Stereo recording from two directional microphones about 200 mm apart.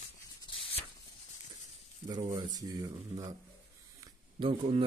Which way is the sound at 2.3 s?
20° right (ahead or behind).